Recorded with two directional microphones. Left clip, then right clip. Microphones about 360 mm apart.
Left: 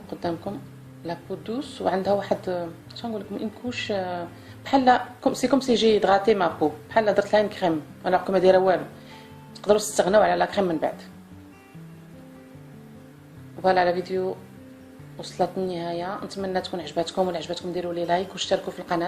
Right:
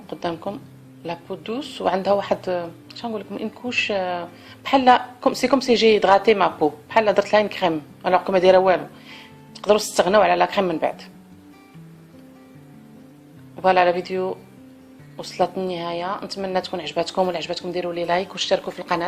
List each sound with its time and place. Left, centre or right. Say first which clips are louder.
0.1 s a sound: right 3 dB; centre
1.0 s a woman's voice: right 3 dB; centre
9.9 s a woman's voice: right 3 dB; centre
13.6 s a woman's voice: right 4 dB; centre
15.7 s a woman's voice: right 4 dB; centre